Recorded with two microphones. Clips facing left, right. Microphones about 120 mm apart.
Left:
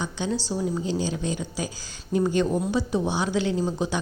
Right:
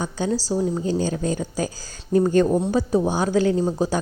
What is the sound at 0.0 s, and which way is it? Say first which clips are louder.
A woman's voice: right 4 dB; 40° right (ahead or behind).